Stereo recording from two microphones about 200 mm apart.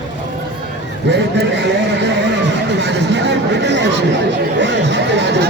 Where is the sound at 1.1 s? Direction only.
60° right (ahead or behind).